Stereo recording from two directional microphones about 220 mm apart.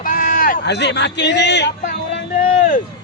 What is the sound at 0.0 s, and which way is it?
Speech, 40° left (ahead or behind).